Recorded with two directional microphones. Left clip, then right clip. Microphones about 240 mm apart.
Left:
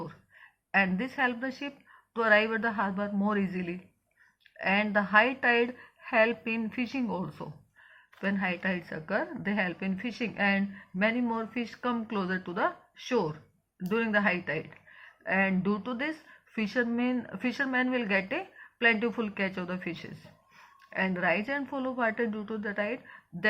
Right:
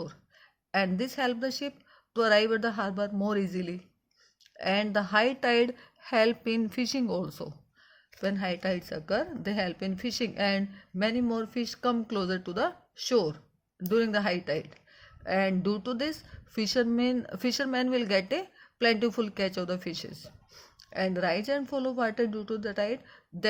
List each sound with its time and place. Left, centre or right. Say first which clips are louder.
0.7 s a woman's voice: left 2 dB; right